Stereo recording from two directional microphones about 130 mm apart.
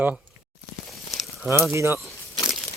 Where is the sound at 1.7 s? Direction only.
20° right (ahead or behind).